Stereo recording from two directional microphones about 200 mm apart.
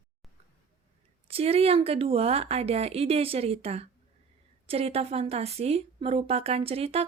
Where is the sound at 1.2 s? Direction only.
30° right (ahead or behind).